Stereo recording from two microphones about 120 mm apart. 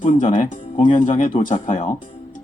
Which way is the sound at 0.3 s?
45° left (ahead or behind).